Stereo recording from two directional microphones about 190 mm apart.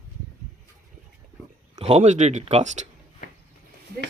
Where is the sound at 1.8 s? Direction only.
35° right (ahead or behind).